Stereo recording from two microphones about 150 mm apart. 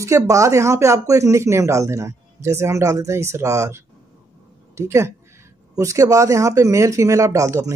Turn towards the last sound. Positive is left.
turn(degrees=-20)  # may be behind; listen again after turning